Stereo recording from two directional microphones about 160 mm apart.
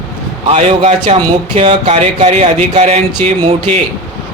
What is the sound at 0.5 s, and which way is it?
Speech, 45° right (ahead or behind).